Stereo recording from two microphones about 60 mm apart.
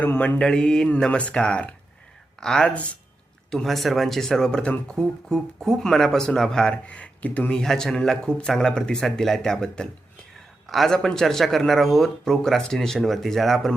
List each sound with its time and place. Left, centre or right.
0.3 s speech: centre
2.6 s speech: left
3.5 s speech: centre
6.8 s speech: left
7.6 s speech: centre